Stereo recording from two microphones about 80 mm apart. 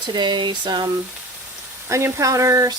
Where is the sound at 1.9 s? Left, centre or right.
Right.